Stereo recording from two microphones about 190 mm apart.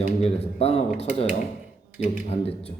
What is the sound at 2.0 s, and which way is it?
Speech, 30° left (ahead or behind).